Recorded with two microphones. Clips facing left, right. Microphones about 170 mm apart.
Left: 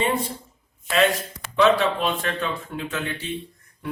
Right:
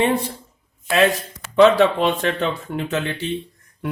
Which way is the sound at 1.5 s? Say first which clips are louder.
Right 6 dB; 70° right (ahead or behind).